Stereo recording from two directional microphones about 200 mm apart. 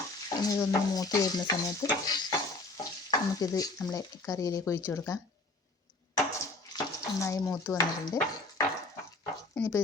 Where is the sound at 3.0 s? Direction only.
20° left (ahead or behind).